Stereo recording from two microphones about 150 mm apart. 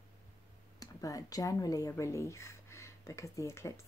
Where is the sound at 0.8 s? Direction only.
25° left (ahead or behind).